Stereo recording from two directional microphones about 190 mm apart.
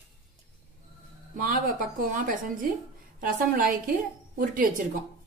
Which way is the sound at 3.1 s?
45° right (ahead or behind).